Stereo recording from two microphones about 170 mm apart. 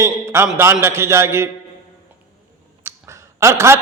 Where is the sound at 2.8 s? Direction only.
15° right (ahead or behind).